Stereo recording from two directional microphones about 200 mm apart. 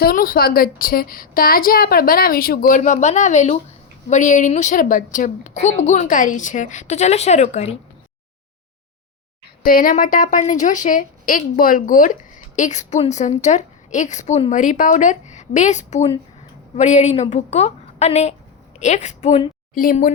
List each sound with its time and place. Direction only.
0.0 s a woman's voice: 45° left (ahead or behind)
9.6 s a woman's voice: 45° left (ahead or behind)